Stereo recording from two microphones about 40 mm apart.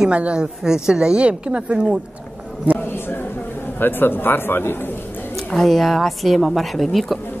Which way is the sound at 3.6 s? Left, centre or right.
Left.